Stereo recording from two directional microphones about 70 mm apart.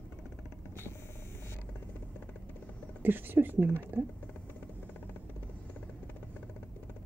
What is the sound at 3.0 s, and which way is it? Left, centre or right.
Speech, right.